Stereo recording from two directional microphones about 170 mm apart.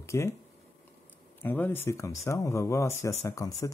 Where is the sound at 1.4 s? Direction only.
10° left (ahead or behind).